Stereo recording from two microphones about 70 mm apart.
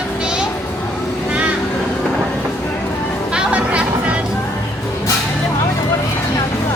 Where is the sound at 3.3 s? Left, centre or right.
Centre.